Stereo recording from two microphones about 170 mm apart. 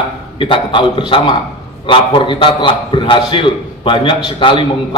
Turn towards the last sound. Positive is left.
turn(degrees=30)  # may be behind; listen again after turning